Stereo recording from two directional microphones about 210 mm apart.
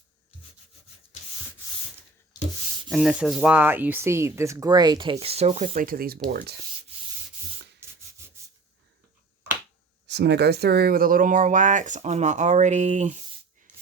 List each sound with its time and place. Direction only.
2.9 s speech: centre (ahead or behind); by 6.6 s 45° right (ahead or behind)
10.1 s speech: 55° right (ahead or behind); by 13.1 s 35° right (ahead or behind)